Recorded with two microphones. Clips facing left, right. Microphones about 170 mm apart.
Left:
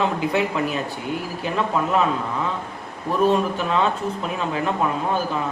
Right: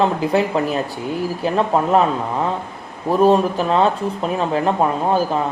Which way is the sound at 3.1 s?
35° right (ahead or behind).